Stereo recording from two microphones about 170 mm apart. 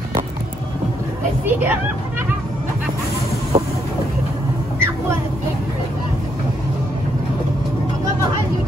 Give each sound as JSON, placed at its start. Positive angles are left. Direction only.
{"t": 1.4, "sound": "speech", "side_deg": -10}
{"t": 3.5, "sound": "vehicle", "side_deg": -40}